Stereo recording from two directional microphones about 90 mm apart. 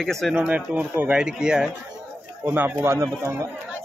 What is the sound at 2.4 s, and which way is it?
Speech, 20° right (ahead or behind).